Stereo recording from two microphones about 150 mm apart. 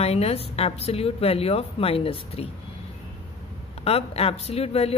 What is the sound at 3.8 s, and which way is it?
Speech, 40° left (ahead or behind).